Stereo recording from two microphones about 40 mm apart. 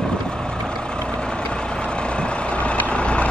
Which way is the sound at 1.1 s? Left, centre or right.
Left.